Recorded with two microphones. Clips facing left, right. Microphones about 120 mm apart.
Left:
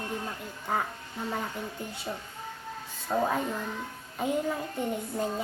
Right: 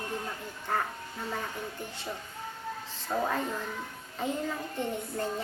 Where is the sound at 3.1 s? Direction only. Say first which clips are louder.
Left 2 dB; 10° left (ahead or behind).